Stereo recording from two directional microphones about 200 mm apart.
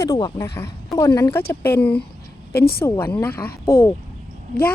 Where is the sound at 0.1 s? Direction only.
20° left (ahead or behind).